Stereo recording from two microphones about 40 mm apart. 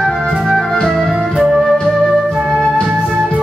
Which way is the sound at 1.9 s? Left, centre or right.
Centre.